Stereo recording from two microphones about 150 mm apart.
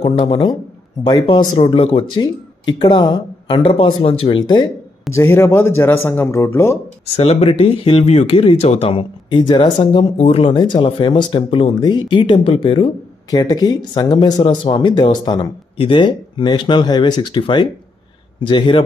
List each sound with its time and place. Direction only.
1.0 s speech: 30° left (ahead or behind)
5.1 s speech: 15° left (ahead or behind)
7.2 s speech: 40° left (ahead or behind)